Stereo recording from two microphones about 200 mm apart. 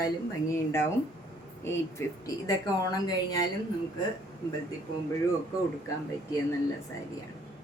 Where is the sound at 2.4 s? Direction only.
20° left (ahead or behind).